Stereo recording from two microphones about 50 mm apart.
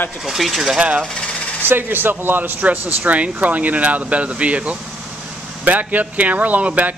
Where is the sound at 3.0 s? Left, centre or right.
Right.